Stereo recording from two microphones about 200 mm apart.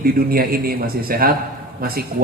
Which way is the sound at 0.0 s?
50° right (ahead or behind).